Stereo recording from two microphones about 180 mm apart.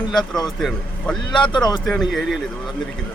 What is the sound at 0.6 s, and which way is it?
Speech, centre (ahead or behind).